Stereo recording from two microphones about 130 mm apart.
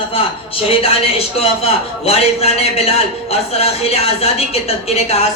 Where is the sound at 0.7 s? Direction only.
45° left (ahead or behind).